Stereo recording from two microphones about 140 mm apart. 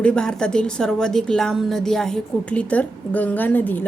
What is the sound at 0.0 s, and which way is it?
A woman's voice, 5° left (ahead or behind).